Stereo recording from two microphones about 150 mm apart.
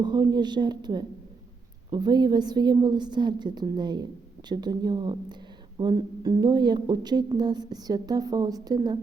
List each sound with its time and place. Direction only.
0.0 s a woman's voice: 25° right (ahead or behind)